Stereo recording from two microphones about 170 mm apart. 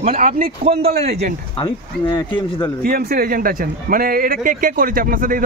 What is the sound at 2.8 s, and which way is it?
Speech, 60° right (ahead or behind).